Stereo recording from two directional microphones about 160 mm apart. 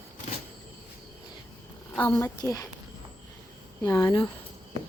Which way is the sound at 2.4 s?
20° left (ahead or behind).